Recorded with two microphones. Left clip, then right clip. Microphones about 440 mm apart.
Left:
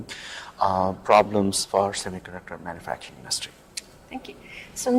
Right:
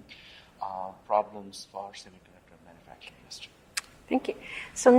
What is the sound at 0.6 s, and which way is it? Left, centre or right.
Speech, left.